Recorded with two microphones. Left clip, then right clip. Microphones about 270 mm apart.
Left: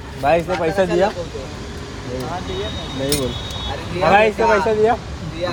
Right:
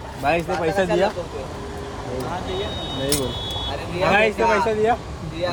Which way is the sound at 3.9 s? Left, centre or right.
Centre.